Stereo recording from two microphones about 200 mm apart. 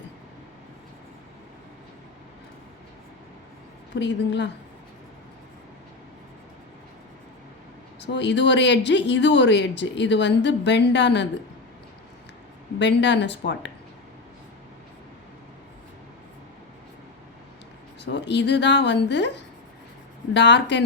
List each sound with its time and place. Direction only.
3.9 s speech: 60° left (ahead or behind)
8.0 s speech: 60° left (ahead or behind)
12.8 s speech: 60° left (ahead or behind)
18.0 s speech: 60° left (ahead or behind)
20.3 s speech: 60° left (ahead or behind)